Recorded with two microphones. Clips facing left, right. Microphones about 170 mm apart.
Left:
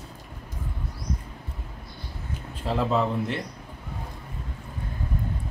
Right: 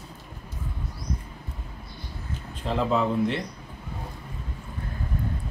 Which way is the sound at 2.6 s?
5° left (ahead or behind).